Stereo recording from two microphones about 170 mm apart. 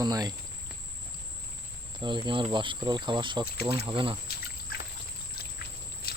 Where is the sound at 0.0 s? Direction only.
20° right (ahead or behind).